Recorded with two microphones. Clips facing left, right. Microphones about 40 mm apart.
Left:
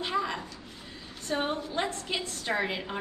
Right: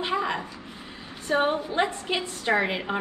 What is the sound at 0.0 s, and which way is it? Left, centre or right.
A woman's voice, right.